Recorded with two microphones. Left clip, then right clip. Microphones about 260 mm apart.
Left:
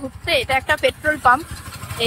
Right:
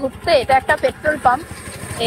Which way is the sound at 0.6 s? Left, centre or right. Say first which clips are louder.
Right 3 dB; left.